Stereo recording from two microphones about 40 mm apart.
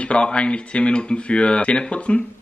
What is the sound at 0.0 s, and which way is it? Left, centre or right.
Speech, left.